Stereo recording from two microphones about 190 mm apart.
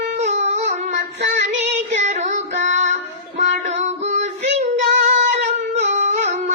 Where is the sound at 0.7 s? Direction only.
40° right (ahead or behind).